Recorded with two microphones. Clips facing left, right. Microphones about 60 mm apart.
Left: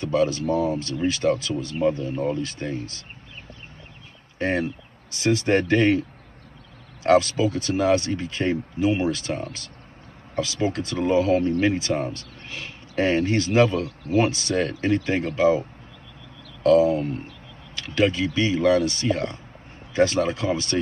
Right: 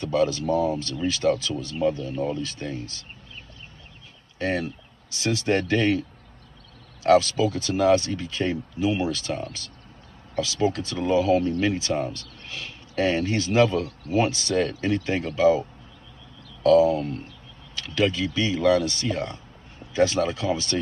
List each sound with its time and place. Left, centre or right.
0.0 s speech: left
4.4 s speech: left
16.6 s speech: left